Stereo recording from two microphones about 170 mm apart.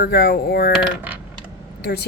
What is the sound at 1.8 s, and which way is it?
Speech, 70° left (ahead or behind).